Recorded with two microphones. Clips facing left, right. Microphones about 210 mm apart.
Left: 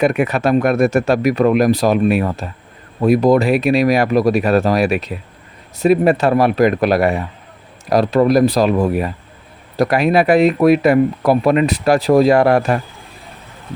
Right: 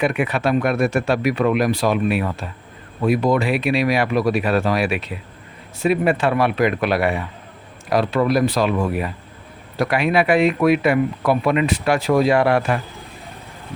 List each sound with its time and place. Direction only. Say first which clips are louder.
0.0 s speech: left 4 dB; 45° left (ahead or behind)